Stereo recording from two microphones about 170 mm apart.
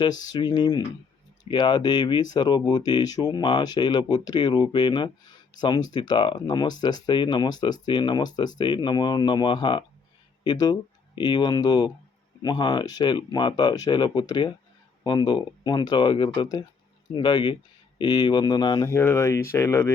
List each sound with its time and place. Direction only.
0.0 s speech: 25° left (ahead or behind)